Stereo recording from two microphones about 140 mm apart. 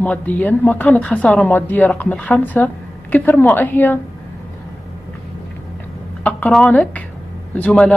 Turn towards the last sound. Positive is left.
turn(degrees=10)  # may be behind; listen again after turning